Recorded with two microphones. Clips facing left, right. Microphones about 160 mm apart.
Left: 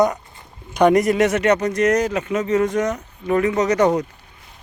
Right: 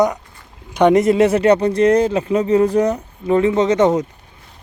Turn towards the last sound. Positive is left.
turn(degrees=-25)  # may be behind; listen again after turning